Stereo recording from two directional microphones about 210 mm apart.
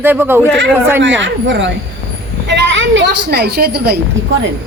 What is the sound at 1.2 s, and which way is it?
Speech, 60° right (ahead or behind).